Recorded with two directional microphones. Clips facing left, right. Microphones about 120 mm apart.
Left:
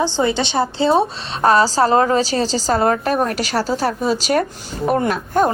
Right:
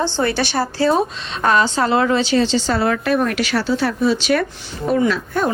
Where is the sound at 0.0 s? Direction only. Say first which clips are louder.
Left 1 dB; 15° left (ahead or behind); by 4.4 s 40° left (ahead or behind).